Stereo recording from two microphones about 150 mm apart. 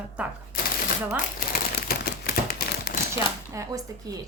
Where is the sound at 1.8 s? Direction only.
90° left.